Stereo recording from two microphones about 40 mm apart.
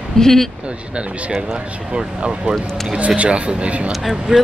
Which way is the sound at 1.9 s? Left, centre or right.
Right.